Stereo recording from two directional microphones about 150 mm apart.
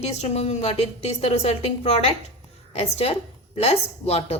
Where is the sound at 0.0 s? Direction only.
45° left (ahead or behind).